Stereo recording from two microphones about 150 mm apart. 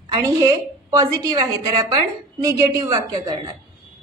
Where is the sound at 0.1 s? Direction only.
25° right (ahead or behind).